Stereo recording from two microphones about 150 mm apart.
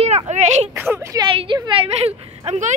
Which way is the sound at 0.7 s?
15° right (ahead or behind).